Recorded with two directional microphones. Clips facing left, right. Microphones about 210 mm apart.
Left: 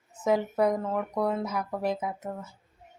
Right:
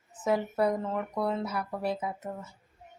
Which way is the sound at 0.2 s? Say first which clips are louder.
Left 2 dB; 15° left (ahead or behind).